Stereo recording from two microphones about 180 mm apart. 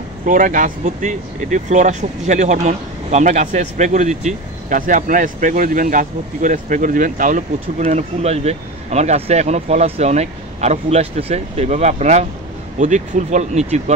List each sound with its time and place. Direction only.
0.2 s speech: 45° right (ahead or behind)